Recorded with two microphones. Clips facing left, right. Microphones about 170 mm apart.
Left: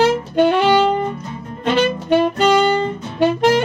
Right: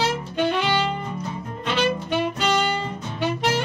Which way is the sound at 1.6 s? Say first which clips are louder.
Left 6 dB; 50° left (ahead or behind).